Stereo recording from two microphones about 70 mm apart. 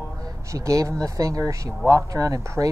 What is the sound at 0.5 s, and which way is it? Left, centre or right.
Speech, right.